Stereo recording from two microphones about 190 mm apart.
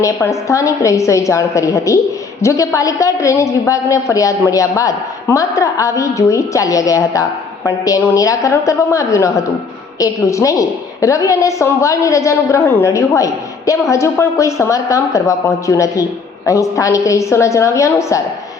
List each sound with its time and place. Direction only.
0.0 s a woman's voice: 15° left (ahead or behind)